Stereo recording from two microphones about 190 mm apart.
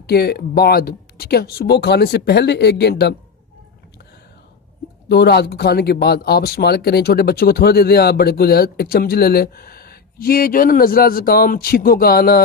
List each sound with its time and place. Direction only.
0.0 s speech: 55° left (ahead or behind)
5.0 s speech: 60° left (ahead or behind)